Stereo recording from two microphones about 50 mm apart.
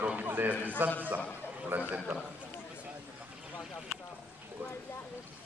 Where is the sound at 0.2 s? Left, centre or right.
Right.